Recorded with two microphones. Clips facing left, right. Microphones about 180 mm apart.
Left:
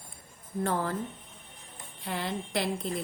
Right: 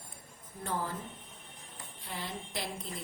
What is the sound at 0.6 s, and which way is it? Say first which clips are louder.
Speech: left 6 dB; 70° left (ahead or behind).